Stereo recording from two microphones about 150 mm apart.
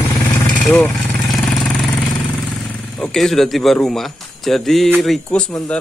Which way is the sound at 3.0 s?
Centre (ahead or behind).